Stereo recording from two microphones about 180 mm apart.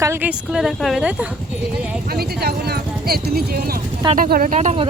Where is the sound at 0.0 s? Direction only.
10° right (ahead or behind).